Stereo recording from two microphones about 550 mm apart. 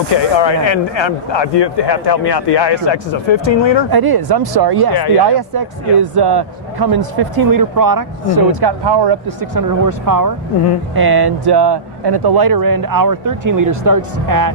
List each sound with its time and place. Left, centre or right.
0.1 s speech: left
3.8 s a man's voice: right
9.4 s a man's voice: right